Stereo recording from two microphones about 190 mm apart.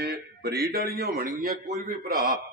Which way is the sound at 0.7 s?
55° right (ahead or behind).